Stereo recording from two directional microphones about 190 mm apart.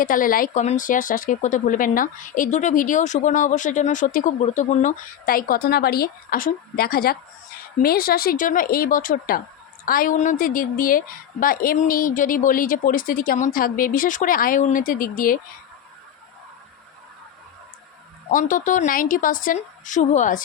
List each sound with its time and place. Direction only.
0.0 s speech: 45° left (ahead or behind)
18.3 s speech: 45° left (ahead or behind)